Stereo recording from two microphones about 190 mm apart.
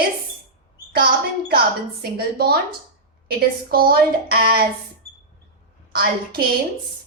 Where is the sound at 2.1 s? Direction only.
55° right (ahead or behind).